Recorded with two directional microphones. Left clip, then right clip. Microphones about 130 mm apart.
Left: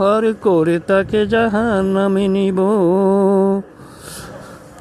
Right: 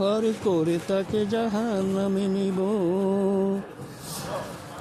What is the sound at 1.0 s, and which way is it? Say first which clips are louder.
Speech: left 10 dB; 60° left (ahead or behind).